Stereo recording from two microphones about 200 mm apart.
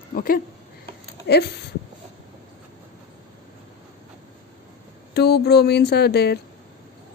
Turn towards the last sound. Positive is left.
turn(degrees=55)  # may be behind; listen again after turning